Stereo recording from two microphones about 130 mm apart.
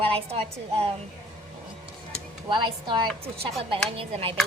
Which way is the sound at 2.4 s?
40° right (ahead or behind).